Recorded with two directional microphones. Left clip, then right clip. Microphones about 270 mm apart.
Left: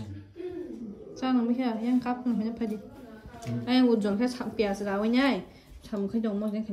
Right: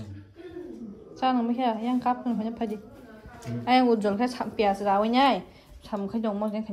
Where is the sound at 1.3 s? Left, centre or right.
Centre.